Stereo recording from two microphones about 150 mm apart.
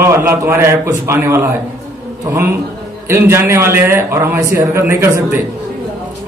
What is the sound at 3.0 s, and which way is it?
A man's voice, 15° right (ahead or behind).